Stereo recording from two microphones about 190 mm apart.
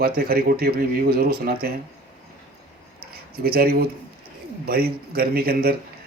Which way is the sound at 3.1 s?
55° right (ahead or behind).